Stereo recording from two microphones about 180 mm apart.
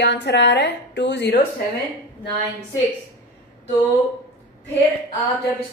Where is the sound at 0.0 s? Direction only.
70° left (ahead or behind).